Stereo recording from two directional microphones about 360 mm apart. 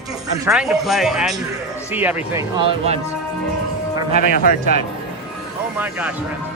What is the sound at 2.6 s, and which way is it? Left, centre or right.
Speech, centre.